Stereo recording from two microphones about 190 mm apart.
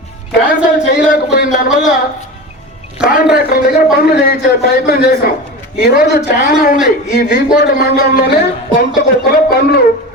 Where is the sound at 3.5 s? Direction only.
55° left (ahead or behind).